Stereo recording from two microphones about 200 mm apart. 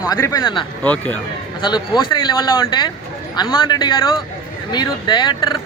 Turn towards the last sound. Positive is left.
turn(degrees=20)  # may be behind; listen again after turning